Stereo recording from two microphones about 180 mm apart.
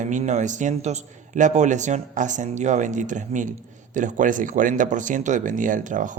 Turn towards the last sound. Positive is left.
turn(degrees=-45)  # may be behind; listen again after turning